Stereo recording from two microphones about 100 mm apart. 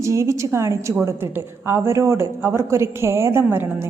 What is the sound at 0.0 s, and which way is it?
A man's voice, 30° right (ahead or behind).